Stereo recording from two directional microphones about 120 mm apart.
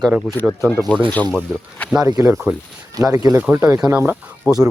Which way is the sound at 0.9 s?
10° left (ahead or behind).